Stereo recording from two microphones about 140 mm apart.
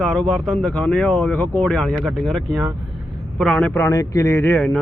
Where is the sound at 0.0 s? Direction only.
Centre (ahead or behind).